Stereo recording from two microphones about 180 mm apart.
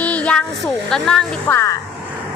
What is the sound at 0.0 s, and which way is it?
A woman's voice, 5° left (ahead or behind).